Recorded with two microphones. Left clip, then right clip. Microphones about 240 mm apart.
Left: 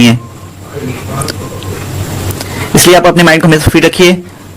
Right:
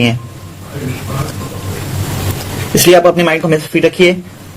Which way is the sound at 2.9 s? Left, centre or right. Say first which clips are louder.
Left 3 dB; left.